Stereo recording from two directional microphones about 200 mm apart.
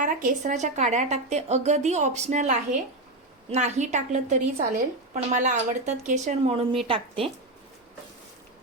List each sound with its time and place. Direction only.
0.0 s speech: 40° right (ahead or behind)